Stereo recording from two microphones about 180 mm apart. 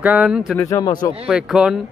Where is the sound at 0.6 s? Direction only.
20° left (ahead or behind).